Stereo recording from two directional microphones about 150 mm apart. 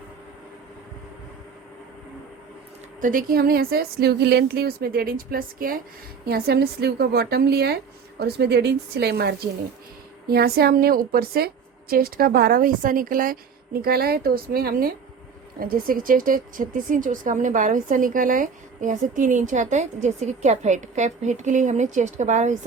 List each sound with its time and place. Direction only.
3.0 s speech: 70° right (ahead or behind)
6.2 s a woman's voice: 90° right
15.5 s speech: 75° right (ahead or behind); by 22.5 s 55° right (ahead or behind)